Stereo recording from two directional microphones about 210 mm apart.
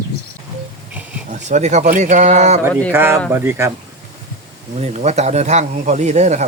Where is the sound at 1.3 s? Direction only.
35° right (ahead or behind).